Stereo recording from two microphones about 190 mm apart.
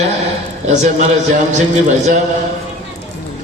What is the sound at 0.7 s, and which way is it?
A man's voice, 40° right (ahead or behind).